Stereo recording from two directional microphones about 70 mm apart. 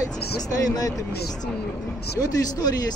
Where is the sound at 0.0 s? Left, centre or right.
Left.